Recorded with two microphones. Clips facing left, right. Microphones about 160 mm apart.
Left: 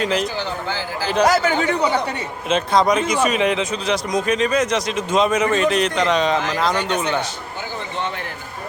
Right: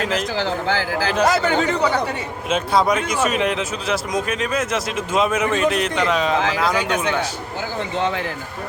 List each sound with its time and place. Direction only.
0.0 s speech: centre (ahead or behind)
0.3 s speech: 90° right
1.2 s speech: 5° left (ahead or behind)
2.5 s speech: 5° right (ahead or behind)